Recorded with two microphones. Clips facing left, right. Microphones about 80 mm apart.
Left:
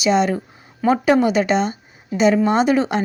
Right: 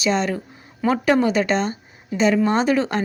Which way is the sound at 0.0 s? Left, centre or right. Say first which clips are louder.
Left 4 dB; centre.